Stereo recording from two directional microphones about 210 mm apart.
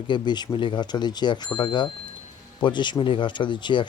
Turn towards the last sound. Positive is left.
turn(degrees=20)  # may be behind; listen again after turning